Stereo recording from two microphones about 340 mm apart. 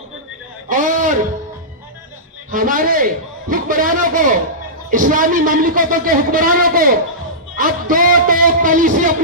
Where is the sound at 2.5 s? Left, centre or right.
Right.